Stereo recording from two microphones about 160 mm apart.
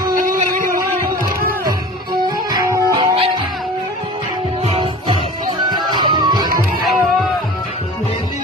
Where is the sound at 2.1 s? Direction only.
25° right (ahead or behind).